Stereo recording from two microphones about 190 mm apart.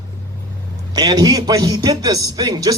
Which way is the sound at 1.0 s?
20° right (ahead or behind).